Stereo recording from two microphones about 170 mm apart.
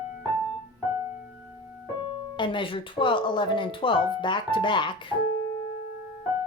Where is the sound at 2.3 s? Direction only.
30° left (ahead or behind).